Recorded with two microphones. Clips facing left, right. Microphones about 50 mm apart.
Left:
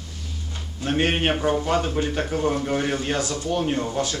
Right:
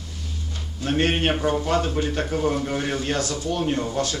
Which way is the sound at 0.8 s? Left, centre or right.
Centre.